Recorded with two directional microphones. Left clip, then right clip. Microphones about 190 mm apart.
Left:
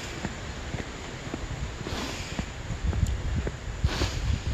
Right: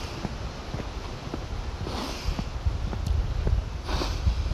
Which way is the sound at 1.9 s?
10° right (ahead or behind).